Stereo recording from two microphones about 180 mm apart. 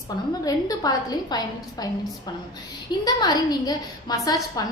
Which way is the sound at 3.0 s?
20° left (ahead or behind).